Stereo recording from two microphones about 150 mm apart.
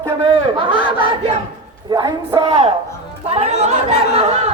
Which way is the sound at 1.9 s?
25° right (ahead or behind).